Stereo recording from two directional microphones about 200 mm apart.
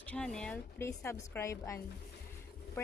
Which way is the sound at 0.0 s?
5° left (ahead or behind).